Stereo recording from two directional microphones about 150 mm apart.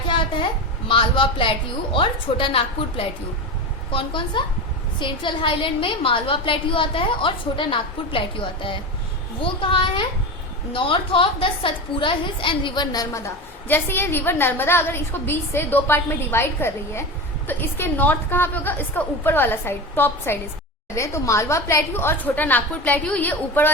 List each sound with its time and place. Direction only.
0.1 s a woman's voice: 35° left (ahead or behind); by 23.7 s 10° left (ahead or behind)